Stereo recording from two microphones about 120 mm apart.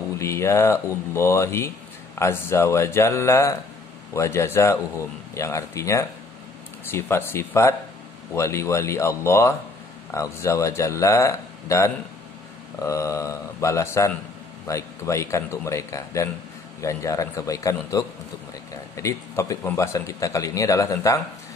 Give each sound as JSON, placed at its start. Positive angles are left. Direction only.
{"t": 0.2, "sound": "speech", "side_deg": 25}